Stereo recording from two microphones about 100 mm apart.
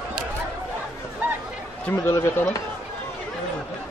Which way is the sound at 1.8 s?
20° left (ahead or behind).